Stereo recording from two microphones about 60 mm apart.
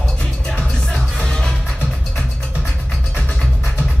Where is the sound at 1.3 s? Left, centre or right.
Centre.